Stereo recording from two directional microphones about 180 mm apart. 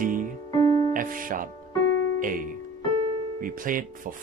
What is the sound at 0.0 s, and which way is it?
Music, 45° right (ahead or behind).